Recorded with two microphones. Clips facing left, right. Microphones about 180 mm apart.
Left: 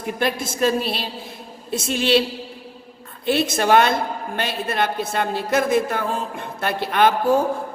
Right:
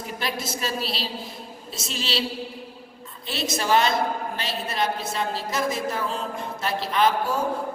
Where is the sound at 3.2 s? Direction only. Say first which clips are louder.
Left 7 dB; 55° left (ahead or behind).